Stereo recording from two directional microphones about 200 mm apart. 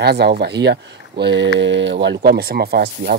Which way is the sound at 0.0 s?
55° right (ahead or behind).